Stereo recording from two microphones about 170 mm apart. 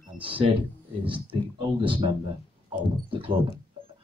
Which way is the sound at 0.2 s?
30° right (ahead or behind).